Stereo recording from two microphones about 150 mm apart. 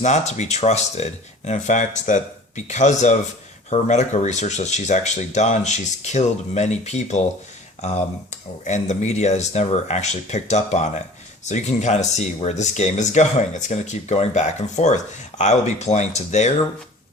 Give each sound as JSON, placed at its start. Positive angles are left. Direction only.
{"t": 0.0, "sound": "speech", "side_deg": 50}